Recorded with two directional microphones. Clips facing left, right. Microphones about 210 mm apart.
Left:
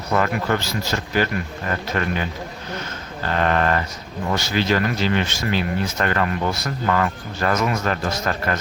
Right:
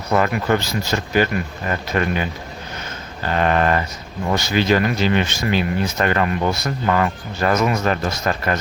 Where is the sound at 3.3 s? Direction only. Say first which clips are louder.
Right 2 dB; 15° right (ahead or behind).